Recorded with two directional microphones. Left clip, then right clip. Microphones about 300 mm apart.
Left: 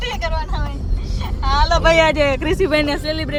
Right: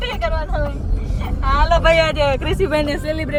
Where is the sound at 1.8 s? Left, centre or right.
Left.